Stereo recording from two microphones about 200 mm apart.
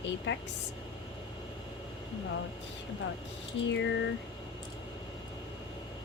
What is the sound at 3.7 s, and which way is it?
Speech, 65° left (ahead or behind).